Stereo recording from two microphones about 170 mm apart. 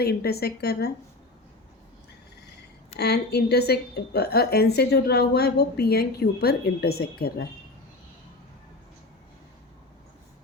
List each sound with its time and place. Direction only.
0.0 s a woman's voice: 70° left (ahead or behind)
3.0 s a woman's voice: 75° left (ahead or behind)